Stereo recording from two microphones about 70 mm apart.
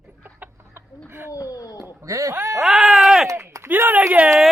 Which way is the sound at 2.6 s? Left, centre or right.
Centre.